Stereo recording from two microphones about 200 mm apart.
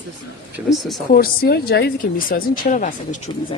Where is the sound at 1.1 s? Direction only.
50° left (ahead or behind).